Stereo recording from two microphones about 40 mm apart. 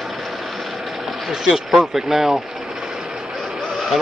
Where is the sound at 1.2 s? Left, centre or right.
Centre.